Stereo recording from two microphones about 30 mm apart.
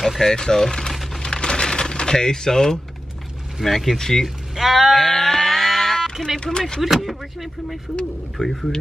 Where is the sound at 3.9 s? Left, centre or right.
Centre.